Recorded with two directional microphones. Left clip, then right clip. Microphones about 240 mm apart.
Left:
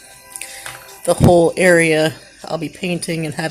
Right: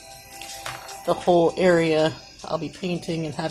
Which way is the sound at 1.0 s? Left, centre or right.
Left.